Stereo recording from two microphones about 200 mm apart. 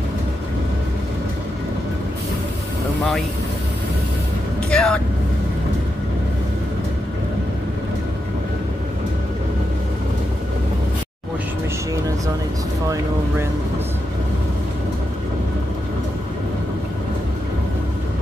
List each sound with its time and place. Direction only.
3.0 s vehicle: centre (ahead or behind)
4.6 s speech: 5° left (ahead or behind)
12.8 s vehicle: 15° right (ahead or behind)